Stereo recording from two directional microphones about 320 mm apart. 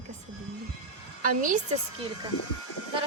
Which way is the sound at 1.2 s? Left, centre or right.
Right.